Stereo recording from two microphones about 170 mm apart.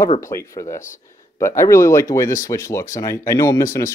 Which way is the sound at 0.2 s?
15° left (ahead or behind).